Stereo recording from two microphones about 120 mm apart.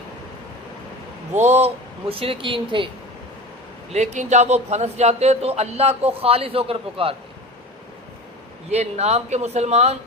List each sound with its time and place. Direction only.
1.3 s speech: 70° right (ahead or behind); by 2.9 s 45° right (ahead or behind)
3.9 s a man's voice: 75° right (ahead or behind); by 7.2 s 50° right (ahead or behind)
8.7 s a man's voice: 65° right (ahead or behind)